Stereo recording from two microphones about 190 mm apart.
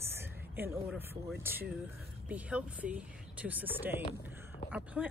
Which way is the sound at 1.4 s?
10° right (ahead or behind).